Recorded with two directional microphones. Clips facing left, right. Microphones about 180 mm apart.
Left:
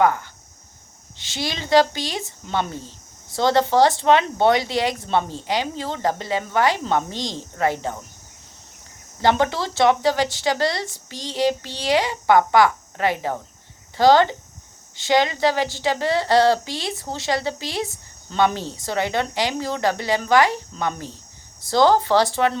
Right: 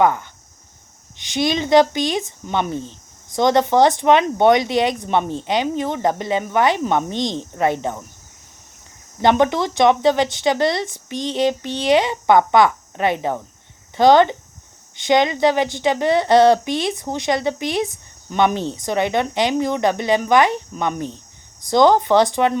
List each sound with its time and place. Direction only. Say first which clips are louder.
0.0 s speech: right 2 dB; 20° right (ahead or behind)
9.2 s speech: right 4 dB; 20° right (ahead or behind)